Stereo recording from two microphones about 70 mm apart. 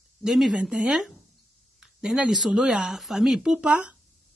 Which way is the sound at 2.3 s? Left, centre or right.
Centre.